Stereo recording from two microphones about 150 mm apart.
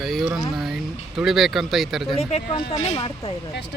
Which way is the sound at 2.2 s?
45° left (ahead or behind).